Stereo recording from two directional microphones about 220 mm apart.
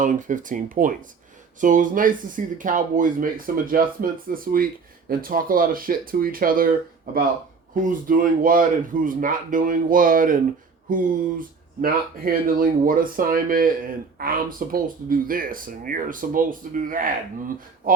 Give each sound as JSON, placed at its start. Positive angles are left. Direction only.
{"t": 0.0, "sound": "speech", "side_deg": -35}
{"t": 7.8, "sound": "speech", "side_deg": -40}